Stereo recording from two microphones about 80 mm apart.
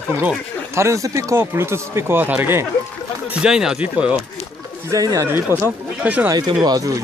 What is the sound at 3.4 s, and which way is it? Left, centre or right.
Speech, centre.